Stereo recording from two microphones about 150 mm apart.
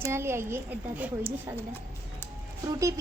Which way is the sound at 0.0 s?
15° right (ahead or behind).